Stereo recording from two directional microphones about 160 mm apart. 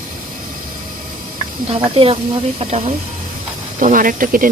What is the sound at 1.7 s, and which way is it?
Speech, 35° right (ahead or behind).